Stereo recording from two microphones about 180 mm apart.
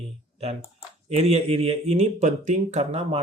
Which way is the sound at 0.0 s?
35° right (ahead or behind).